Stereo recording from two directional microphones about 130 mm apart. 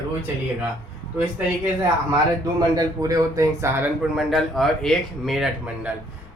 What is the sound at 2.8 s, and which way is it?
Speech, 25° right (ahead or behind).